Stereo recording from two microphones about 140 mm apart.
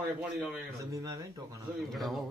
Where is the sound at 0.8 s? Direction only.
25° right (ahead or behind).